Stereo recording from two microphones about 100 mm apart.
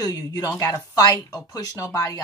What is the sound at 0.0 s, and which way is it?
Speech, 40° left (ahead or behind).